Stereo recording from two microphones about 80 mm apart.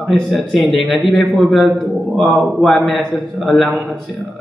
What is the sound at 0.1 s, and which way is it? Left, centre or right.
A man's voice, centre.